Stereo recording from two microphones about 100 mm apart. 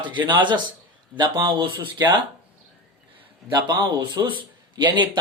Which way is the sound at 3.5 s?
50° right (ahead or behind).